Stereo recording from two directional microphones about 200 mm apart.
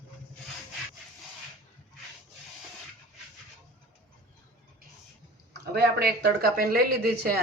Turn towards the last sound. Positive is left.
turn(degrees=-50)  # may be behind; listen again after turning